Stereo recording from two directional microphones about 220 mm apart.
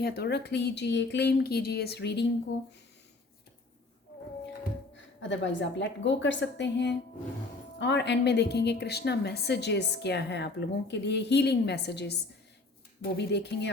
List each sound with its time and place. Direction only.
0.0 s a woman's voice: 50° left (ahead or behind)
5.3 s a woman's voice: 55° left (ahead or behind)